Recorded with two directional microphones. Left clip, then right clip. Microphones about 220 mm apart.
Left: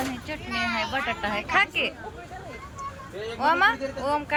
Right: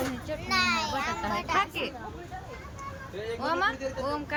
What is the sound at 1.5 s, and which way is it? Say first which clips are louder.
Speech: left 7 dB; 5° right (ahead or behind).